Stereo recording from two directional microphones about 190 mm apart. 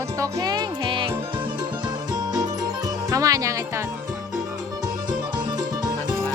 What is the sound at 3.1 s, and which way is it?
Speech, 15° right (ahead or behind).